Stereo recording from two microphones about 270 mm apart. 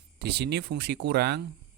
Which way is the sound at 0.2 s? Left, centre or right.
Right.